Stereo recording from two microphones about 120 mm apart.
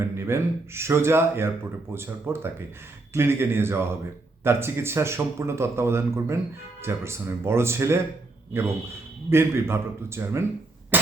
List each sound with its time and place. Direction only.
0.0 s speech: 20° right (ahead or behind)
9.3 s speech: 20° right (ahead or behind)
10.9 s cough: 15° right (ahead or behind)